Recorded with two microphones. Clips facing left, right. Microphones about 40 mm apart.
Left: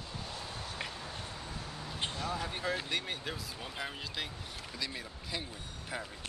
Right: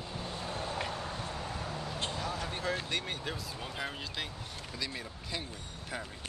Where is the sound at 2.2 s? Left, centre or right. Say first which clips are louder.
Left 1 dB; centre.